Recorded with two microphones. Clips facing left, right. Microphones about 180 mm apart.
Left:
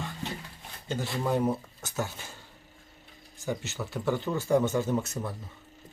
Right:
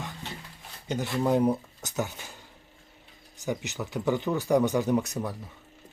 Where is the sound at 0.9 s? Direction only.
20° right (ahead or behind).